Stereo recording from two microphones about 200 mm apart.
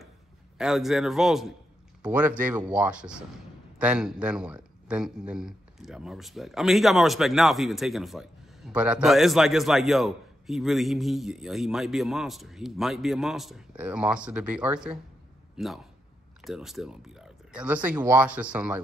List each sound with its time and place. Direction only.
0.6 s a man's voice: centre (ahead or behind)